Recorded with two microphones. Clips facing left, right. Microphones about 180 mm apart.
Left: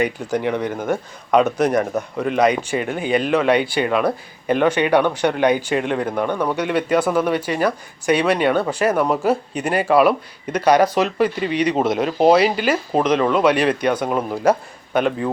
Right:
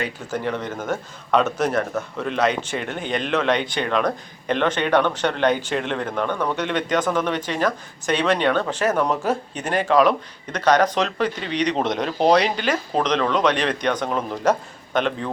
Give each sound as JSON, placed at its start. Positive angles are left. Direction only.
{"t": 0.0, "sound": "speech", "side_deg": 15}